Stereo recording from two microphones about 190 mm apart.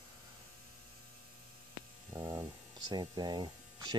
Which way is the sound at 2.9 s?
25° right (ahead or behind).